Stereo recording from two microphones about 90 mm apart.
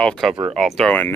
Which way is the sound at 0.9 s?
20° left (ahead or behind).